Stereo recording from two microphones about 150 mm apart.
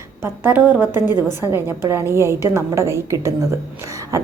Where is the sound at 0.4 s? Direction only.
10° right (ahead or behind).